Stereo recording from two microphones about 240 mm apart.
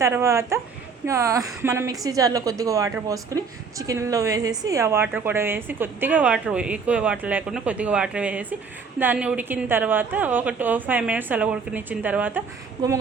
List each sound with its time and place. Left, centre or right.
0.0 s a woman's voice: centre